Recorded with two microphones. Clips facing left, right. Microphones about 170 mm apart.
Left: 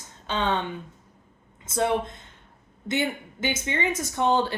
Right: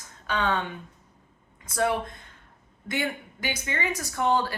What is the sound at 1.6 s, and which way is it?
Speech, 20° left (ahead or behind).